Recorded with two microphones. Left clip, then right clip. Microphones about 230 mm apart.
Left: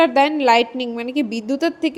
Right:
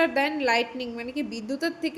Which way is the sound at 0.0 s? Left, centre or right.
Left.